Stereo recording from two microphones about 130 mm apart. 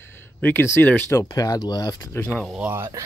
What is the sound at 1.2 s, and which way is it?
Speech, 30° left (ahead or behind).